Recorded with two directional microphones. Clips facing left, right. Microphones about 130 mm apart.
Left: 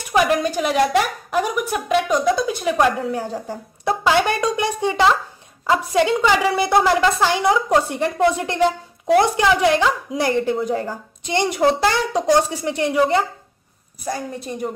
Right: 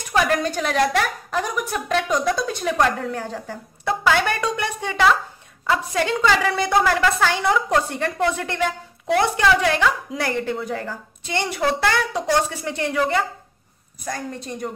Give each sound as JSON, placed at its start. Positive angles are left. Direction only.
{"t": 0.1, "sound": "a sound", "side_deg": 15}
{"t": 0.9, "sound": "a woman's voice", "side_deg": 10}
{"t": 6.8, "sound": "a woman's voice", "side_deg": 25}
{"t": 14.0, "sound": "a woman's voice", "side_deg": 10}